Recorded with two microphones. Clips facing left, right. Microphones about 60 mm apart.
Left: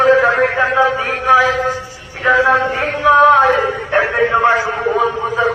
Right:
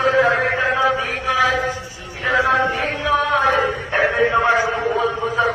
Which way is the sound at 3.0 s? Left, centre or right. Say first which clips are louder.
Left 9 dB; left.